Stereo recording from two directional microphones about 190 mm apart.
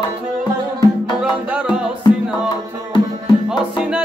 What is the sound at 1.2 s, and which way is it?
Music, 5° right (ahead or behind).